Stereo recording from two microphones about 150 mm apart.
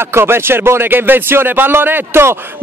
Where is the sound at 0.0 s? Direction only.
15° right (ahead or behind).